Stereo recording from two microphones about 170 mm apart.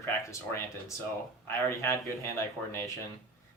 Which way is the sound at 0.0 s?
15° left (ahead or behind).